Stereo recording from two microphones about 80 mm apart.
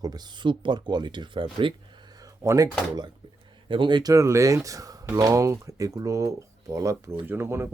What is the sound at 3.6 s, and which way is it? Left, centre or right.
Speech, right.